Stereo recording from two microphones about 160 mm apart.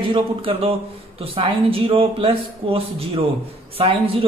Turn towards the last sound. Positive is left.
turn(degrees=-35)  # may be behind; listen again after turning